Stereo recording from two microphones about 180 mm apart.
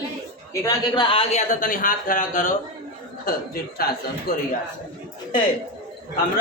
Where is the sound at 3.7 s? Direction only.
60° left (ahead or behind).